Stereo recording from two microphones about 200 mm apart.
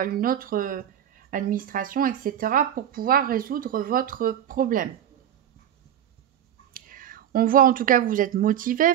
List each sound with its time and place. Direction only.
0.0 s speech: 45° right (ahead or behind)
6.7 s speech: 45° right (ahead or behind)